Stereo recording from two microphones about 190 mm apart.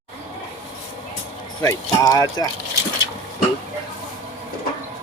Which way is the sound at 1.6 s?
20° left (ahead or behind).